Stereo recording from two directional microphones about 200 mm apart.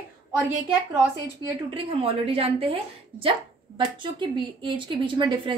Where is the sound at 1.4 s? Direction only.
25° right (ahead or behind).